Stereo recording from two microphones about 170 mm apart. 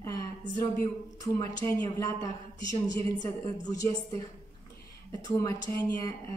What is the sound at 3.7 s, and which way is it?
Speech, 20° left (ahead or behind).